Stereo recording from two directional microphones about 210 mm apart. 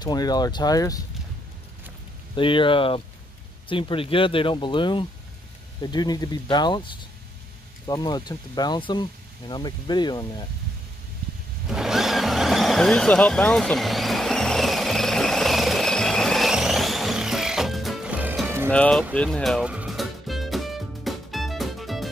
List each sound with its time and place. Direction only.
0.0 s speech: 20° left (ahead or behind)
2.3 s speech: 25° left (ahead or behind)
7.8 s speech: 20° left (ahead or behind)
11.7 s vehicle: centre (ahead or behind)
18.7 s speech: 5° left (ahead or behind)
19.1 s music: 5° left (ahead or behind)